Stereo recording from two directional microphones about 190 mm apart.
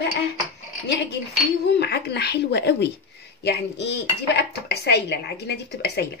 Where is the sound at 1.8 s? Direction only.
60° left (ahead or behind).